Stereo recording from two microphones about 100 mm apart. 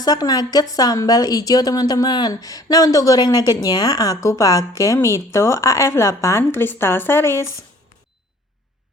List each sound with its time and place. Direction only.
0.0 s a woman's voice: 40° left (ahead or behind); by 7.4 s 25° left (ahead or behind)